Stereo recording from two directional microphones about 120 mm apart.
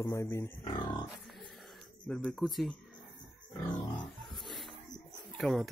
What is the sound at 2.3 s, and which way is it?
Speech, centre (ahead or behind).